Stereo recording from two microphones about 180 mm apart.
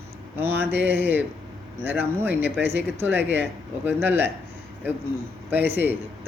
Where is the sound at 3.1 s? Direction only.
75° right (ahead or behind).